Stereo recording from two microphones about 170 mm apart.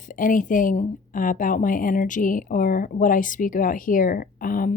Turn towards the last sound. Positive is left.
turn(degrees=55)  # may be behind; listen again after turning